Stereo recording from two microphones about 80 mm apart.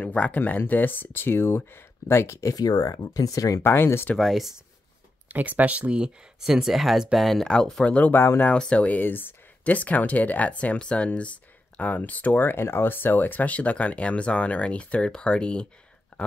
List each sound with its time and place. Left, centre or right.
0.0 s speech: centre; by 2.5 s left
2.5 s speech: left
3.6 s speech: left
4.2 s speech: centre
5.3 s speech: centre; by 8.5 s left
8.5 s speech: centre
16.1 s a sound: centre